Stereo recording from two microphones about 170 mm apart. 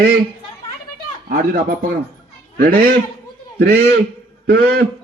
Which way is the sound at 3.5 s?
70° right (ahead or behind).